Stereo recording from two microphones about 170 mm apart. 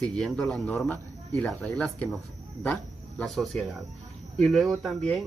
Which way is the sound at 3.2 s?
Centre (ahead or behind).